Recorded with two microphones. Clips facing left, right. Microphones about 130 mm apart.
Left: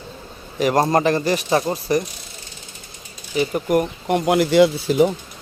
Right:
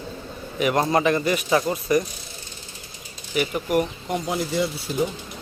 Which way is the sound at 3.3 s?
30° left (ahead or behind).